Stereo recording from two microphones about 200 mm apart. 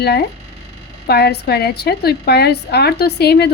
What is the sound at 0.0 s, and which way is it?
A woman's voice, 55° left (ahead or behind).